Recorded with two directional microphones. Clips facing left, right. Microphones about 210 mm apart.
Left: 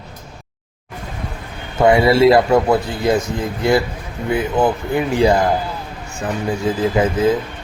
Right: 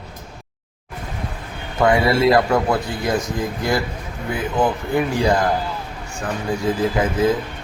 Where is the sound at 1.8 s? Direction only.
25° left (ahead or behind).